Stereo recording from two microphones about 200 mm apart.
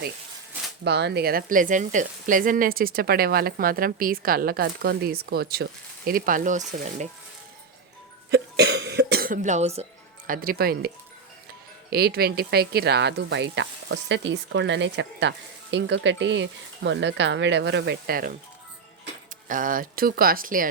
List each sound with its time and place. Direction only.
0.9 s speech: 60° right (ahead or behind); by 7.1 s 35° right (ahead or behind)
8.3 s cough: 55° right (ahead or behind); by 9.8 s 35° right (ahead or behind)
10.2 s speech: 45° right (ahead or behind)
19.5 s speech: 40° right (ahead or behind)